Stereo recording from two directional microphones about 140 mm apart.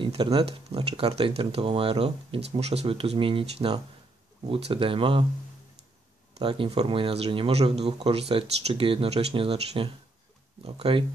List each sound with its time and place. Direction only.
0.0 s speech: 35° right (ahead or behind)
6.3 s speech: 40° right (ahead or behind)